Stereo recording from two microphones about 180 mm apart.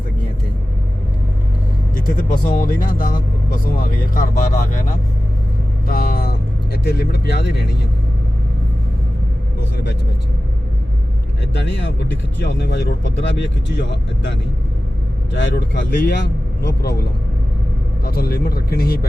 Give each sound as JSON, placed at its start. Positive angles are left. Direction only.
{"t": 2.1, "sound": "speech", "side_deg": 50}
{"t": 11.5, "sound": "speech", "side_deg": 80}
{"t": 18.0, "sound": "a man's voice", "side_deg": 60}